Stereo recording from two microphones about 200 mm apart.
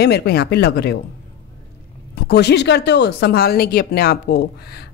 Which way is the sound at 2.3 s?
55° left (ahead or behind).